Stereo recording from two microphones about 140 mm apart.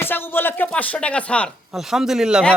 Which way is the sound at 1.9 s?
5° right (ahead or behind).